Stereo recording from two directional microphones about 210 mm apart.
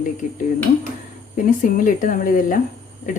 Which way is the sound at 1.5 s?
40° left (ahead or behind).